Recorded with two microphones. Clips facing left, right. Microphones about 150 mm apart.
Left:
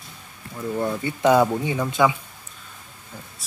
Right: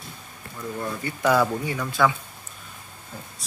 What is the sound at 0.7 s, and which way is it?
Speech, 25° left (ahead or behind).